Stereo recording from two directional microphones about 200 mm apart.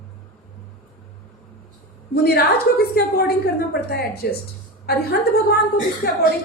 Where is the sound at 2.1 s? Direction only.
50° left (ahead or behind).